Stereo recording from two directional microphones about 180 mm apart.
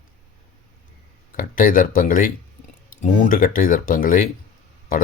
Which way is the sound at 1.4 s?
50° left (ahead or behind).